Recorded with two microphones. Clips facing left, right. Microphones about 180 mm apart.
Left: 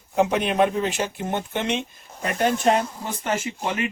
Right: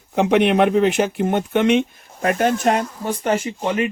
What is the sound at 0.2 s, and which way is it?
Speech, 70° right (ahead or behind).